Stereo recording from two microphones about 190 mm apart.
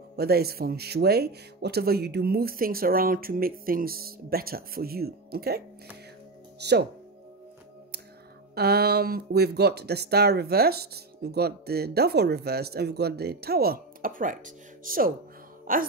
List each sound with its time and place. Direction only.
0.1 s speech: 55° right (ahead or behind)
6.6 s speech: 60° right (ahead or behind)
8.5 s speech: 55° right (ahead or behind)